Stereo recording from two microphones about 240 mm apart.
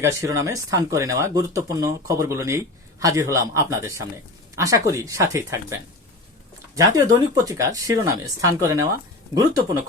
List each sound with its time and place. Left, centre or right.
0.0 s speech: centre